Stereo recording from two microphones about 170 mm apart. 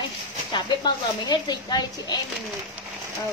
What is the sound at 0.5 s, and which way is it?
Speech, 25° left (ahead or behind).